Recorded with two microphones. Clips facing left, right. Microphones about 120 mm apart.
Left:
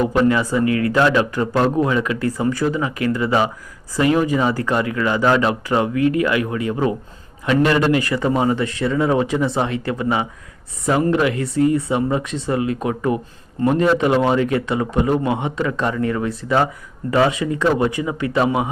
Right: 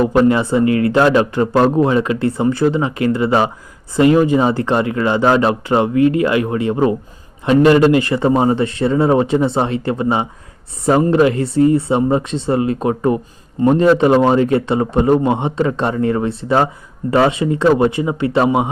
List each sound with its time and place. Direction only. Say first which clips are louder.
0.1 s speech: right 4 dB; 30° right (ahead or behind)